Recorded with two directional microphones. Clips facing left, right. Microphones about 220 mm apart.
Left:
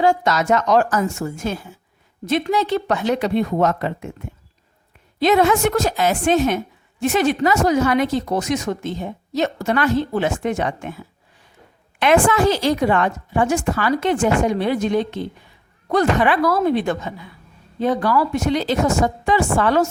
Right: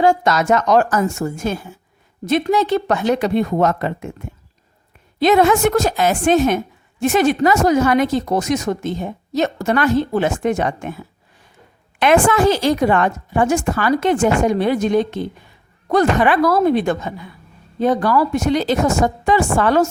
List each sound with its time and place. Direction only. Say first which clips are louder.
0.0 s a woman's voice: right 2 dB; 50° right (ahead or behind)
5.2 s a woman's voice: right 2 dB; 50° right (ahead or behind)
11.9 s a woman's voice: right 2 dB; 50° right (ahead or behind)